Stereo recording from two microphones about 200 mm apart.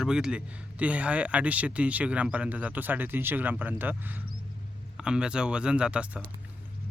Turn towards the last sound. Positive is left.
turn(degrees=-5)  # may be behind; listen again after turning